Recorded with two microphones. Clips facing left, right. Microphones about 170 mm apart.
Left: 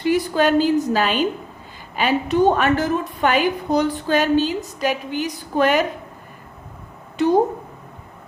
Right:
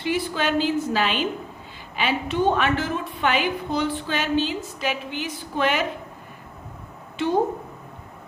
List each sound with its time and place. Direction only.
0.0 s a woman's voice: 40° left (ahead or behind)
7.2 s a woman's voice: 40° left (ahead or behind)